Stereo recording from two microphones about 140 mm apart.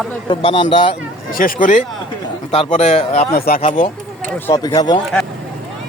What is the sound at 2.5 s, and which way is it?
Speech, 50° left (ahead or behind).